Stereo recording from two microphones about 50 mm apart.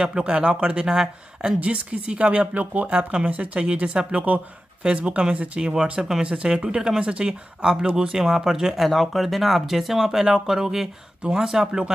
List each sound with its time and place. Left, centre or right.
0.0 s speech: right
1.6 s speech: right
8.8 s speech: centre